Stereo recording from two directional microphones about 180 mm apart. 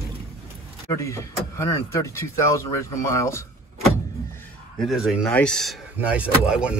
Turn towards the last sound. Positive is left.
turn(degrees=-5)  # may be behind; listen again after turning